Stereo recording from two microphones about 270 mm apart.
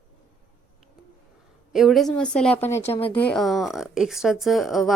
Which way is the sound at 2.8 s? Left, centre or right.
Left.